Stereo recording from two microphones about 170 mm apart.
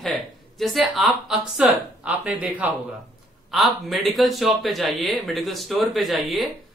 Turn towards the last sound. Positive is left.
turn(degrees=0)  # may be behind; listen again after turning